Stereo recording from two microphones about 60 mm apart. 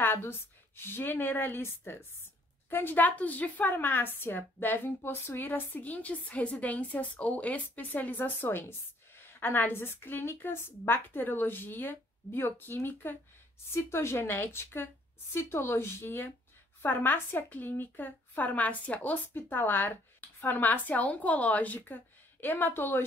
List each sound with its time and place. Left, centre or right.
0.0 s a woman's voice: left
8.5 s speech: left
13.8 s speech: left